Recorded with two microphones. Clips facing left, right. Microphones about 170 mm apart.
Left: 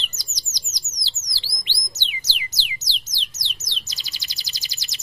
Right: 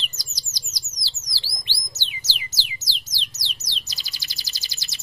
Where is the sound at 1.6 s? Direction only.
20° left (ahead or behind).